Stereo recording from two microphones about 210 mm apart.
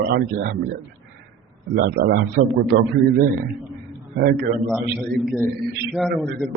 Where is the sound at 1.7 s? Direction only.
50° right (ahead or behind).